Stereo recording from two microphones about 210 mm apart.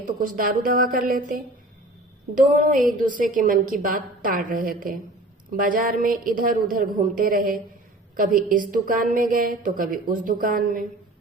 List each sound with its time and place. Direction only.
0.2 s a woman's voice: 40° right (ahead or behind)